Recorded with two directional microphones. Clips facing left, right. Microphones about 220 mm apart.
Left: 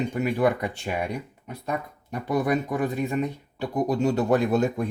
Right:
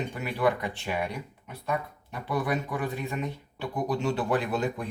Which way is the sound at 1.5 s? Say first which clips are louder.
Left 1 dB; 45° left (ahead or behind).